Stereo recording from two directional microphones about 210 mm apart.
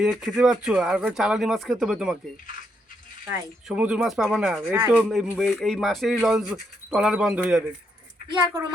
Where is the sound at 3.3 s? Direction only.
5° right (ahead or behind).